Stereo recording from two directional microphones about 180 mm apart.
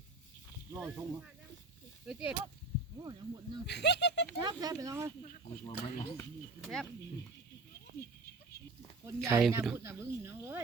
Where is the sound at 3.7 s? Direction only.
70° left (ahead or behind).